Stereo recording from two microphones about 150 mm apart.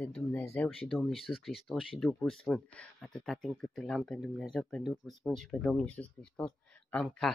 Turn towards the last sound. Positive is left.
turn(degrees=5)  # may be behind; listen again after turning